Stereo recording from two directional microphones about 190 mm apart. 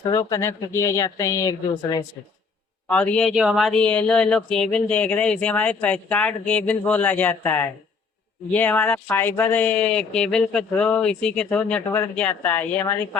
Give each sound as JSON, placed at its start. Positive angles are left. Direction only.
{"t": 0.1, "sound": "speech", "side_deg": 15}
{"t": 2.9, "sound": "speech", "side_deg": 5}